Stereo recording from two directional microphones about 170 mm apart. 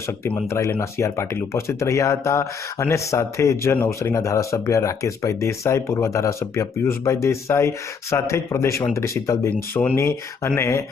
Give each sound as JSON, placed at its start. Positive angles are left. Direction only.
{"t": 0.5, "sound": "speech", "side_deg": 15}